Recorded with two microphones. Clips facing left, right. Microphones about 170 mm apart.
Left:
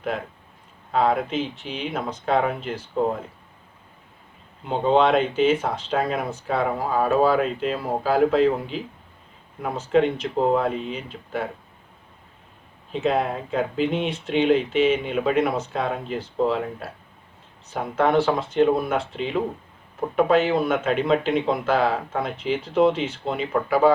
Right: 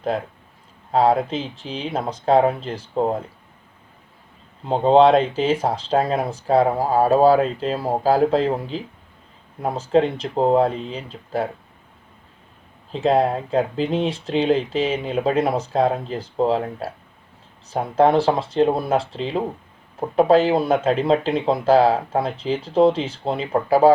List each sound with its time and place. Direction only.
0.9 s speech: 35° right (ahead or behind)
4.6 s speech: 35° right (ahead or behind)
12.9 s speech: 35° right (ahead or behind)
17.9 s speech: 35° right (ahead or behind)